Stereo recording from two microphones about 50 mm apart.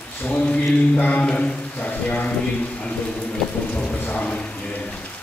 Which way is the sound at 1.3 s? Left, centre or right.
Left.